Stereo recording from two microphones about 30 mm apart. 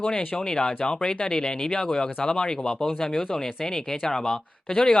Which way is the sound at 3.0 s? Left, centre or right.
Centre.